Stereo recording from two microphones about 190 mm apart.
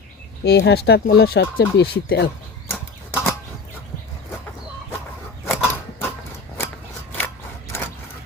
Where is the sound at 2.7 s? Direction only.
15° left (ahead or behind).